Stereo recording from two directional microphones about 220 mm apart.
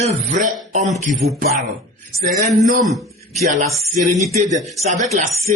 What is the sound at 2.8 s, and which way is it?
Speech, centre (ahead or behind).